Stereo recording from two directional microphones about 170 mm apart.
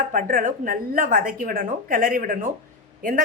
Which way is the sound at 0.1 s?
55° right (ahead or behind).